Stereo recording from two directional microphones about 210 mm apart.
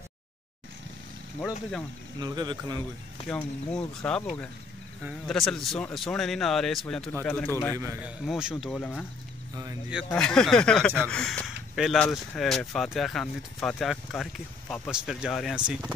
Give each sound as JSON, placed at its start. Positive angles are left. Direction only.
{"t": 2.1, "sound": "speech", "side_deg": -20}
{"t": 3.3, "sound": "speech", "side_deg": 5}
{"t": 7.7, "sound": "a man's voice", "side_deg": -15}
{"t": 8.3, "sound": "speech", "side_deg": -5}
{"t": 10.1, "sound": "speech", "side_deg": 5}